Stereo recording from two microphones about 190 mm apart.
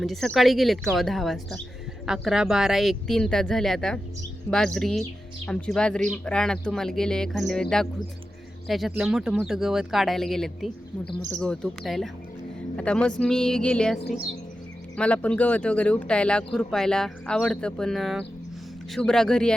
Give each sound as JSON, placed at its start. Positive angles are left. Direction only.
{"t": 0.0, "sound": "speech", "side_deg": 0}